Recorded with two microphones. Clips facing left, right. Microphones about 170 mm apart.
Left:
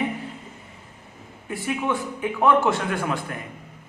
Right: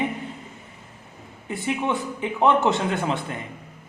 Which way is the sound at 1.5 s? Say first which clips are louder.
Even; 25° right (ahead or behind).